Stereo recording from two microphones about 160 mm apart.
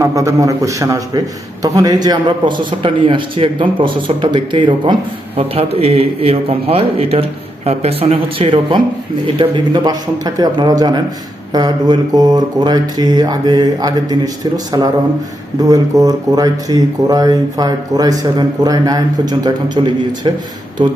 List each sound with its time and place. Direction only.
0.0 s speech: 20° right (ahead or behind)